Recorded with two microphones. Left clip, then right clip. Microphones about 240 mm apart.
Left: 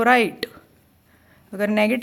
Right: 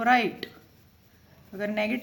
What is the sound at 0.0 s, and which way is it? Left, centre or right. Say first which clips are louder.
Speech: left 6 dB; left.